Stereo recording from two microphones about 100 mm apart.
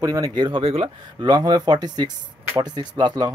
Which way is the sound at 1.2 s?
40° right (ahead or behind).